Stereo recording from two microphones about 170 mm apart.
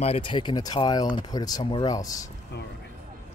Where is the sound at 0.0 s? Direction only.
30° left (ahead or behind).